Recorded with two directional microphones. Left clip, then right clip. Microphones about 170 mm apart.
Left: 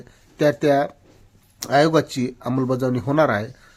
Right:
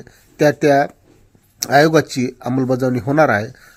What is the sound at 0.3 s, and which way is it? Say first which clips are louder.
Speech: right 4 dB; 15° right (ahead or behind).